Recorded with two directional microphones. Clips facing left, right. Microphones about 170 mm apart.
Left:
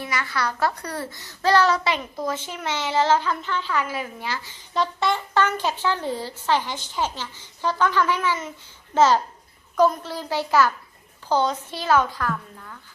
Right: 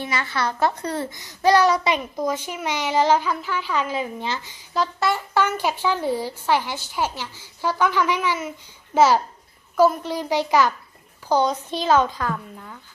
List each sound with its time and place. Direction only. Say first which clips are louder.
0.0 s a child's voice: right 2 dB; 25° right (ahead or behind)
4.7 s a child's voice: right 1 dB; centre (ahead or behind); by 12.7 s 15° right (ahead or behind)